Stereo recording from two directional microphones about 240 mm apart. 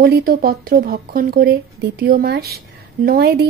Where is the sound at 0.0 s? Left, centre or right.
Right.